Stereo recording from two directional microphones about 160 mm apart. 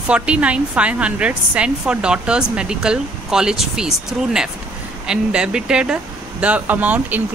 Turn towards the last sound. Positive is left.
turn(degrees=-10)  # may be behind; listen again after turning